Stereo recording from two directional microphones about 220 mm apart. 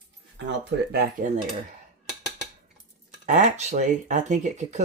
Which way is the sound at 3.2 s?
35° right (ahead or behind).